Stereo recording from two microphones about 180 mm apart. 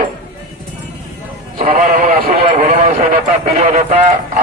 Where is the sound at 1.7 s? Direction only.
55° right (ahead or behind).